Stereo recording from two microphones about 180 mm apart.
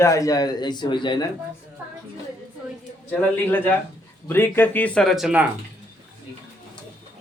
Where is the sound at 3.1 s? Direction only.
10° left (ahead or behind).